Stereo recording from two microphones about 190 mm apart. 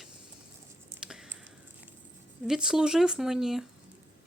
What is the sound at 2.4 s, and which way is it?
Speech, 5° right (ahead or behind).